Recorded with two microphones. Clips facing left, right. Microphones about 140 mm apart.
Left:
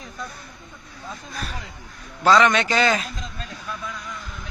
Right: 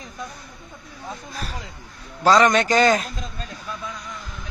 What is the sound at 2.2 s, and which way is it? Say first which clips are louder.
Speech: right 1 dB; 40° right (ahead or behind).